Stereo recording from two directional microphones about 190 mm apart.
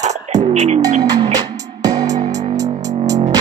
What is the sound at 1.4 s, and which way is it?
Music, 20° right (ahead or behind).